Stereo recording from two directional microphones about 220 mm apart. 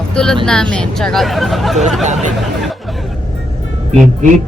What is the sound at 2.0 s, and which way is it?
Speech, 30° right (ahead or behind).